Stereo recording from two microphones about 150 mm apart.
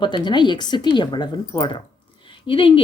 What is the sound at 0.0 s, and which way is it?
Speech, 30° left (ahead or behind).